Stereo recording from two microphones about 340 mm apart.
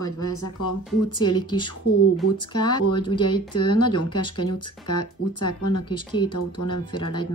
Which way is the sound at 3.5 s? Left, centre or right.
Left.